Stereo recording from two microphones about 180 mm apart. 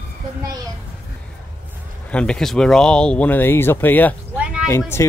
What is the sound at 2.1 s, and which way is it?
Speech, 5° left (ahead or behind).